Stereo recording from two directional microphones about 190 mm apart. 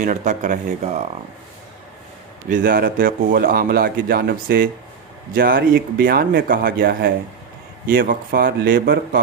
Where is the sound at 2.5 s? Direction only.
50° right (ahead or behind).